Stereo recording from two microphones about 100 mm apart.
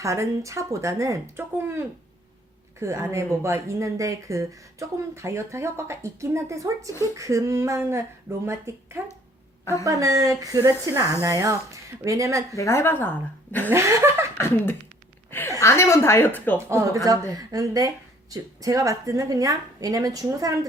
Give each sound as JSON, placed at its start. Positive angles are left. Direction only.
{"t": 0.0, "sound": "speech", "side_deg": -30}
{"t": 12.5, "sound": "a woman's voice", "side_deg": 30}
{"t": 13.7, "sound": "speech", "side_deg": -25}
{"t": 14.3, "sound": "a woman's voice", "side_deg": 20}
{"t": 16.6, "sound": "speech", "side_deg": -30}